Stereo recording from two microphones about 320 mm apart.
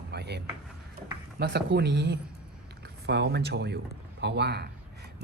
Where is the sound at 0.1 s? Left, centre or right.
Right.